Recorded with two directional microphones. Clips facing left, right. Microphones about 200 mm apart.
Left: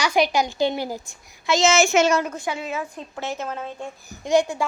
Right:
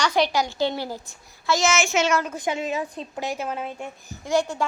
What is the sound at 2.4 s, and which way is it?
A woman's voice, 20° right (ahead or behind).